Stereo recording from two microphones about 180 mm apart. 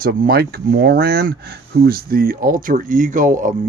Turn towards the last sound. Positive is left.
turn(degrees=-45)  # may be behind; listen again after turning